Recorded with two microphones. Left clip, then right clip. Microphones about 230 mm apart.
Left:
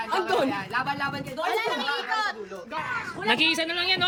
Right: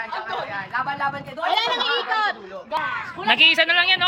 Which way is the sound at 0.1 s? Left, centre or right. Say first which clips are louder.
Left 3 dB; left.